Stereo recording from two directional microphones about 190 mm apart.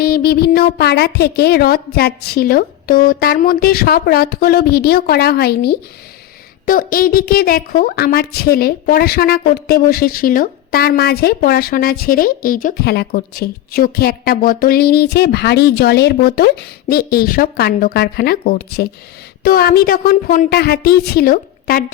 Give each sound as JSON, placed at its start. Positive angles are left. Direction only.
{"t": 0.0, "sound": "speech", "side_deg": 55}